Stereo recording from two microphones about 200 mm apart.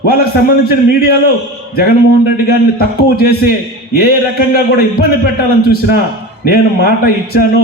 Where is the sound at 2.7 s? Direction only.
50° left (ahead or behind).